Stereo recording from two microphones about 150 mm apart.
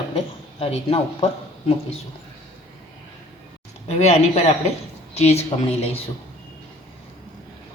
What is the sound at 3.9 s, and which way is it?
A man's voice, 45° left (ahead or behind).